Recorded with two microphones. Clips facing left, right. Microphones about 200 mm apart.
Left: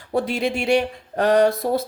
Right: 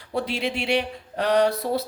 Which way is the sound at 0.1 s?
45° left (ahead or behind).